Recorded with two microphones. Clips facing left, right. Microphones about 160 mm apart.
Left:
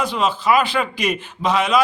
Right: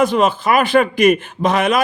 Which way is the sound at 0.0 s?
50° right (ahead or behind).